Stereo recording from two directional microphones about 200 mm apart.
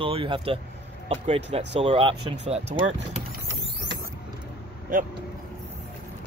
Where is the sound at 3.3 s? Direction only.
60° right (ahead or behind).